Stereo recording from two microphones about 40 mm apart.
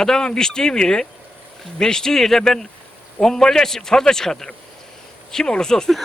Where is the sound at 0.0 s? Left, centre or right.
Centre.